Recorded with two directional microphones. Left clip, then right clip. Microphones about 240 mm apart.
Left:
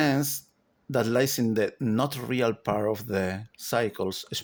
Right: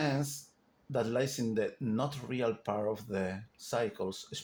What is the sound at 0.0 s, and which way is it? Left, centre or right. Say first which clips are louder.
Speech: left 8 dB; left.